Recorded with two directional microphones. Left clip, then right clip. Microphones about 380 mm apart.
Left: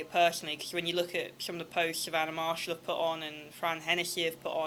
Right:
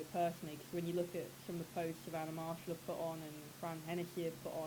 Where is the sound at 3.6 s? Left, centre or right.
Centre.